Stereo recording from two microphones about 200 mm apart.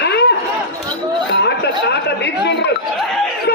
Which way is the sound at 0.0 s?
55° left (ahead or behind).